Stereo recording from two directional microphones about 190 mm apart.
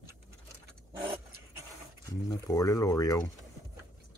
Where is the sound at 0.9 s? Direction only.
15° right (ahead or behind).